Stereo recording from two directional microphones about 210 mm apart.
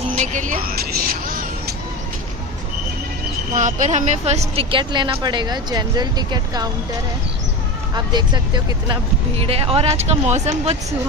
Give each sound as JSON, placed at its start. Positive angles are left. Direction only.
{"t": 0.1, "sound": "vehicle", "side_deg": -35}
{"t": 3.5, "sound": "a woman's voice", "side_deg": -35}
{"t": 7.9, "sound": "a woman's voice", "side_deg": -20}